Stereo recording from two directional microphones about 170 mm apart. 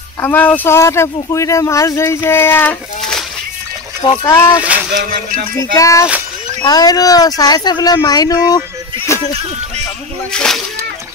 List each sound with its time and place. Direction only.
0.2 s speech: 10° left (ahead or behind)
4.2 s speech: 15° left (ahead or behind)
4.6 s speech: 10° right (ahead or behind)
4.9 s music: 50° right (ahead or behind)
5.6 s speech: 20° left (ahead or behind)
10.3 s speech: 5° left (ahead or behind)